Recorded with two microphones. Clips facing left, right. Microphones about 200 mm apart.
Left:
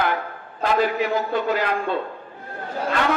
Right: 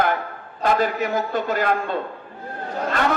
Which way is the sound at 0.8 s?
45° right (ahead or behind).